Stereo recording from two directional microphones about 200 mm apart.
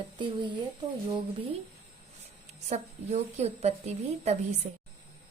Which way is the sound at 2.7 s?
35° right (ahead or behind).